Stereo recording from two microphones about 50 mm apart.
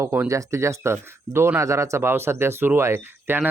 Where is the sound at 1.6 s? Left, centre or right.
Right.